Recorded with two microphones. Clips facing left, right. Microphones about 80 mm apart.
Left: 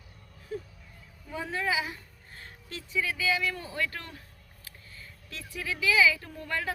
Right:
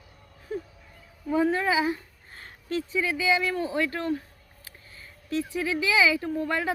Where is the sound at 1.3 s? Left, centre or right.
Right.